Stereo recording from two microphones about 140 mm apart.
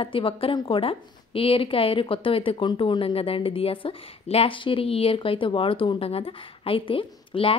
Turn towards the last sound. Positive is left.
turn(degrees=40)  # may be behind; listen again after turning